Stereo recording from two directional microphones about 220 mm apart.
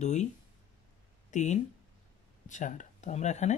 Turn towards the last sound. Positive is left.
turn(degrees=30)  # may be behind; listen again after turning